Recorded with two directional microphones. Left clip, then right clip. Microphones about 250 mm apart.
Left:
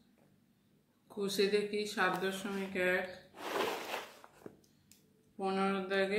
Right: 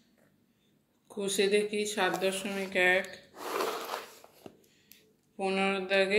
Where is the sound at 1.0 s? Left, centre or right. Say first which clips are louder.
Right 4 dB; centre.